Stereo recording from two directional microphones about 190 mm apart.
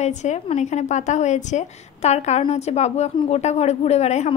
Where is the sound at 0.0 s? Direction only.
35° left (ahead or behind).